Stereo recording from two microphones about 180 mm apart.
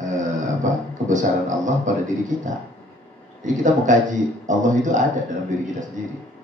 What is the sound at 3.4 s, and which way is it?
A man's voice, 45° right (ahead or behind).